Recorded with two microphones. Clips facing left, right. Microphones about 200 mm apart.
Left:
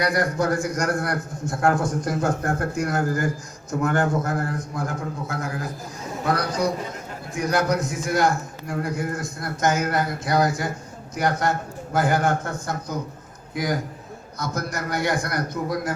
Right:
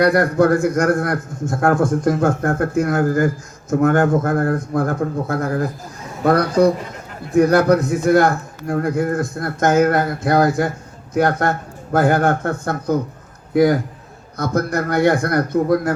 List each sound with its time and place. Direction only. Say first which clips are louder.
0.0 s a man's voice: right 8 dB; 60° right (ahead or behind)